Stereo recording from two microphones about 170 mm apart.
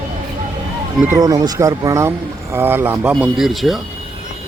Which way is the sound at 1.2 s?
20° right (ahead or behind).